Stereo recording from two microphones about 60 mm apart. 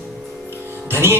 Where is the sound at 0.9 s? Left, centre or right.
Right.